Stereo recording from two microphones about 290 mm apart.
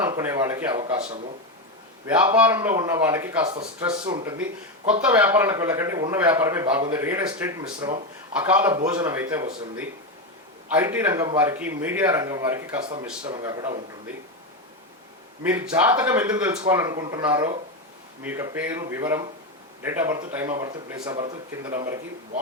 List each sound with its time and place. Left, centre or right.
0.0 s a man's voice: centre
2.0 s a man's voice: centre
15.4 s a man's voice: centre